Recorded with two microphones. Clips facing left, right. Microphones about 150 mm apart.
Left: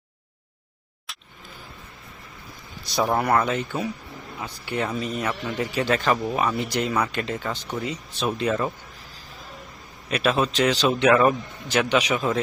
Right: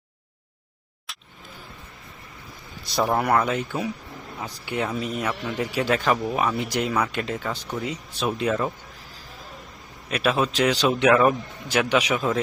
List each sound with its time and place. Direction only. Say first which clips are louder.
2.9 s speech: even; centre (ahead or behind)
4.6 s speech: even; 15° right (ahead or behind)
4.9 s speech: even; 5° right (ahead or behind)
10.1 s speech: even; 5° right (ahead or behind)